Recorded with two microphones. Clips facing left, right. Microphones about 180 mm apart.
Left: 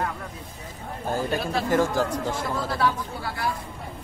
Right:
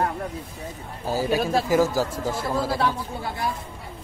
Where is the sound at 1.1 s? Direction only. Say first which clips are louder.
Right 4 dB; 5° right (ahead or behind).